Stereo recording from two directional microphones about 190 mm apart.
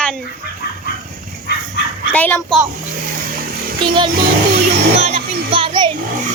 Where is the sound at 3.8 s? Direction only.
25° right (ahead or behind).